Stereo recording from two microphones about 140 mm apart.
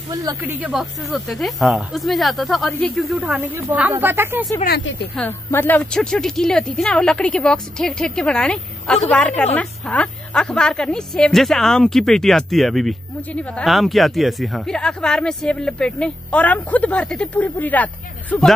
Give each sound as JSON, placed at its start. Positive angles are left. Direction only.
{"t": 0.1, "sound": "speech", "side_deg": -30}
{"t": 0.4, "sound": "a woman's voice", "side_deg": -10}
{"t": 5.1, "sound": "a woman's voice", "side_deg": 15}